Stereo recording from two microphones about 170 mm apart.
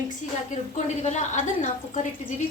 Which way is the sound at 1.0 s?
45° left (ahead or behind).